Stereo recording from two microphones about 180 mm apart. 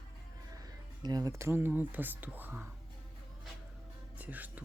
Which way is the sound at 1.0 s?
20° right (ahead or behind).